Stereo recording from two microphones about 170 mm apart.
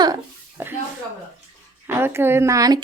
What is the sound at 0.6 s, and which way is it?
Speech, 10° right (ahead or behind).